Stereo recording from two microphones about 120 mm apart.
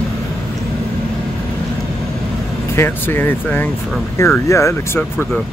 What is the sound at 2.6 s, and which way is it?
Speech, 20° left (ahead or behind).